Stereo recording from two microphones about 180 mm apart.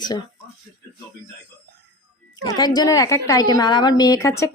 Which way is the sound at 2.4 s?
20° left (ahead or behind).